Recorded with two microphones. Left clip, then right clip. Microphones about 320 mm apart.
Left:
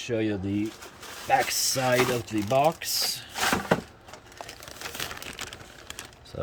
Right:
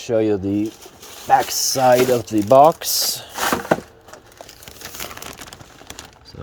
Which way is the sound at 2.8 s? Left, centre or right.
Centre.